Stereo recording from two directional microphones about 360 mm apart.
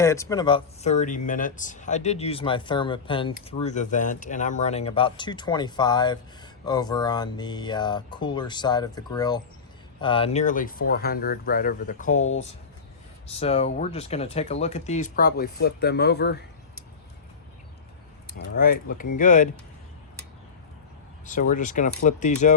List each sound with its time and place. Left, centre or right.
0.0 s speech: centre
12.1 s speech: left
13.2 s speech: centre
18.3 s speech: left
21.2 s speech: left